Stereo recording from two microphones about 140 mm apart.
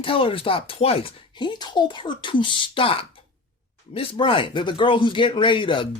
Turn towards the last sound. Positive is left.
turn(degrees=35)  # may be behind; listen again after turning